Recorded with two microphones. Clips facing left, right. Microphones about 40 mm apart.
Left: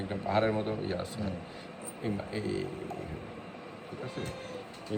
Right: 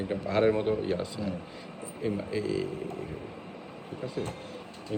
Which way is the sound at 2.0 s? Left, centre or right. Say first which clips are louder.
Right 4 dB; left.